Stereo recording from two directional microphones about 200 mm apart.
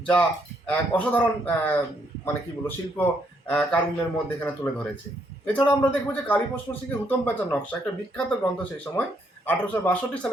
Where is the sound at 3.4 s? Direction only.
5° left (ahead or behind).